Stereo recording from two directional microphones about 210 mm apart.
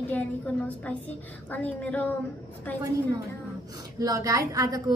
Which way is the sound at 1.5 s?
5° left (ahead or behind).